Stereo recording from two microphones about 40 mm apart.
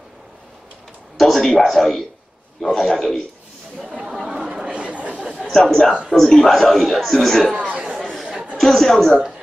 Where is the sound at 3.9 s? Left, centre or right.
Right.